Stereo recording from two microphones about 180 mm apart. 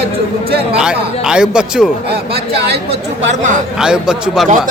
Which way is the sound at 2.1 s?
60° right (ahead or behind).